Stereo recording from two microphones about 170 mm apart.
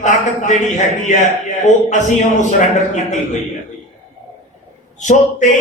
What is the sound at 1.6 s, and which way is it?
A man's voice, 45° left (ahead or behind).